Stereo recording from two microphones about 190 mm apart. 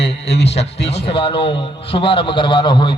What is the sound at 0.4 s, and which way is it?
A man's voice, 35° left (ahead or behind).